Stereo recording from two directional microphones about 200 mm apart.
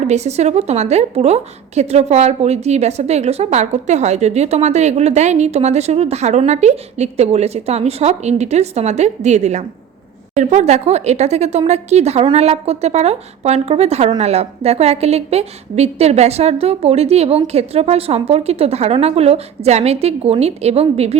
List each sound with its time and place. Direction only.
0.0 s a woman's voice: 35° right (ahead or behind)